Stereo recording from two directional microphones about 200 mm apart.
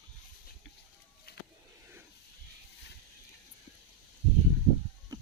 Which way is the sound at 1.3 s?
50° left (ahead or behind).